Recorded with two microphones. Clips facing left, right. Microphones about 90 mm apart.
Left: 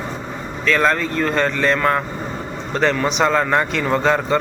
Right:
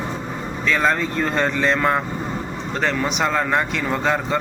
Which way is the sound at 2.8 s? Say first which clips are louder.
Left 4 dB; 5° right (ahead or behind).